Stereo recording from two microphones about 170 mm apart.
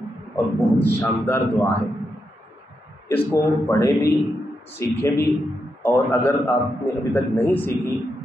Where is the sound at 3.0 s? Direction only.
15° left (ahead or behind).